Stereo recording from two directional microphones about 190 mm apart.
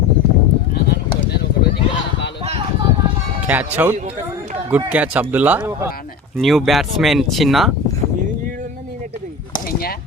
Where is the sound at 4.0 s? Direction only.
40° right (ahead or behind).